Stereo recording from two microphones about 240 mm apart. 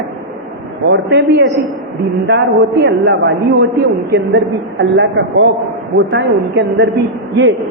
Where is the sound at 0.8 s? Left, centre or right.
Right.